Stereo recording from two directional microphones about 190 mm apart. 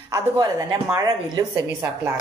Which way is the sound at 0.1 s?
20° right (ahead or behind).